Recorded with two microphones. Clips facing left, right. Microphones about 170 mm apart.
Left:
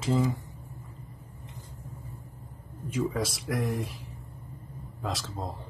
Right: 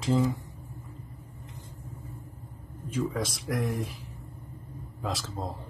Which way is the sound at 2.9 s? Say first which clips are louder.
Left 1 dB; centre (ahead or behind).